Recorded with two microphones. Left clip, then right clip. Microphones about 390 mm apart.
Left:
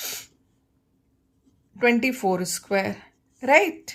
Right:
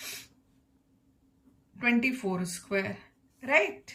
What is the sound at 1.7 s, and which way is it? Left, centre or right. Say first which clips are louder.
A woman's voice: left 7 dB; centre.